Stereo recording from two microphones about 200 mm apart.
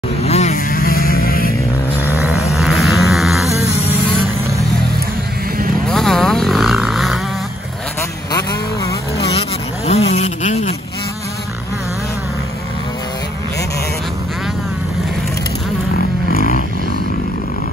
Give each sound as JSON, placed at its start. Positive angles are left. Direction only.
{"t": 0.2, "sound": "vehicle", "side_deg": 30}
{"t": 2.5, "sound": "a sound", "side_deg": 0}
{"t": 5.9, "sound": "vehicle", "side_deg": 0}
{"t": 8.3, "sound": "vehicle", "side_deg": 20}
{"t": 9.3, "sound": "vehicle", "side_deg": 30}
{"t": 16.3, "sound": "a sound", "side_deg": 45}